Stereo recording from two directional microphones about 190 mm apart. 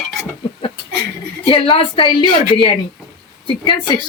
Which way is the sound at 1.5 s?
30° left (ahead or behind).